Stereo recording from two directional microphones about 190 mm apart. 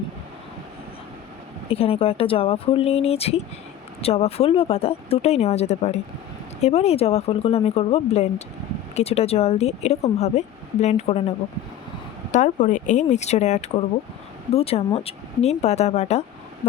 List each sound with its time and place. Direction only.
1.6 s speech: 30° left (ahead or behind)